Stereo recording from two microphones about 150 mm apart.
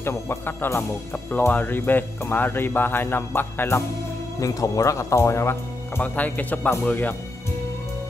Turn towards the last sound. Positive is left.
turn(degrees=10)  # may be behind; listen again after turning